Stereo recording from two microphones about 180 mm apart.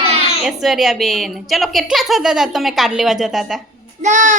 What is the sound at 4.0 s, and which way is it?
Speech, 45° right (ahead or behind).